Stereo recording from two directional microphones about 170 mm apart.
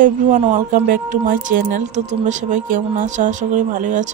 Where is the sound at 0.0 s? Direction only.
50° right (ahead or behind).